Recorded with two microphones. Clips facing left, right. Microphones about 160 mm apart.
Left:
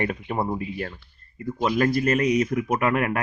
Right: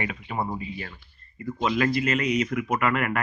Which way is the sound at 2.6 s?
20° left (ahead or behind).